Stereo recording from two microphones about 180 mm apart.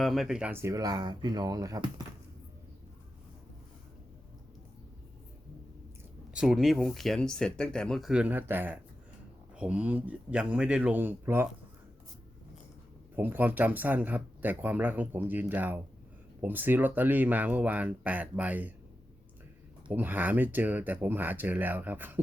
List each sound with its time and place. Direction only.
0.0 s speech: centre (ahead or behind); by 1.9 s 20° right (ahead or behind)
6.3 s speech: 5° right (ahead or behind)
13.1 s speech: 10° right (ahead or behind)
19.9 s speech: 10° right (ahead or behind)